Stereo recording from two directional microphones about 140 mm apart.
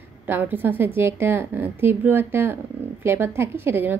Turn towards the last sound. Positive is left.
turn(degrees=-15)  # may be behind; listen again after turning